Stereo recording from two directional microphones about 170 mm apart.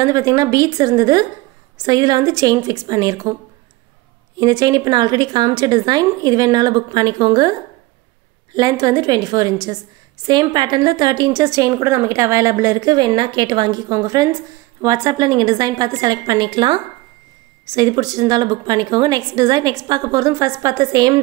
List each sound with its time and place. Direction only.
0.0 s a woman's voice: 20° right (ahead or behind)
4.4 s a woman's voice: 25° right (ahead or behind)
8.5 s a woman's voice: 25° right (ahead or behind)